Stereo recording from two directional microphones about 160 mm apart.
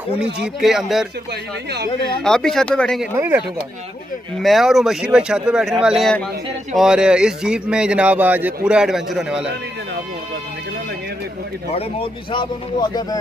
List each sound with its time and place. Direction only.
0.6 s speech: centre (ahead or behind)
1.7 s speech: 90° right
2.2 s speech: 5° left (ahead or behind)
3.2 s speech: 15° right (ahead or behind)
4.4 s speech: centre (ahead or behind)
11.7 s a man's voice: 35° left (ahead or behind)